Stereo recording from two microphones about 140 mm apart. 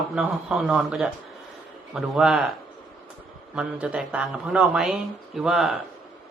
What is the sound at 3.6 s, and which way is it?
A man's voice, 5° right (ahead or behind).